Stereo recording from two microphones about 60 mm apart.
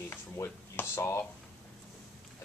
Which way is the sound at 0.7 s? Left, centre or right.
Left.